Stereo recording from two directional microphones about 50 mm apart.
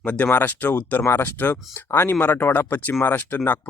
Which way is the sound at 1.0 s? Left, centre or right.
Left.